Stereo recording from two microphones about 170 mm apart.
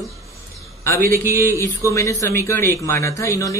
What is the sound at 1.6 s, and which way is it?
Speech, 20° left (ahead or behind).